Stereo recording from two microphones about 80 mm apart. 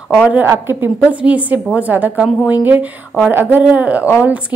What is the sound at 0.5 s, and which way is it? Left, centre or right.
Speech, right.